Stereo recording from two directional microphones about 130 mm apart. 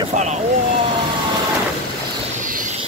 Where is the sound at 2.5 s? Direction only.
90° right.